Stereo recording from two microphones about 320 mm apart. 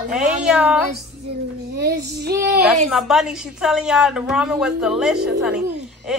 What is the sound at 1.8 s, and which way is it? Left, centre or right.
Child singing, right.